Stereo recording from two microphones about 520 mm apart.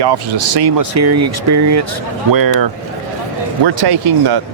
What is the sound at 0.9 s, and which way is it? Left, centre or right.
Speech, right.